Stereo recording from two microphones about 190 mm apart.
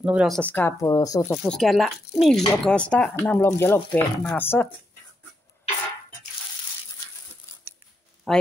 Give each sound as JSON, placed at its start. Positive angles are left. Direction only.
{"t": 0.0, "sound": "speech", "side_deg": -5}
{"t": 0.4, "sound": "speech", "side_deg": 10}
{"t": 1.4, "sound": "speech", "side_deg": 0}
{"t": 8.3, "sound": "speech", "side_deg": 0}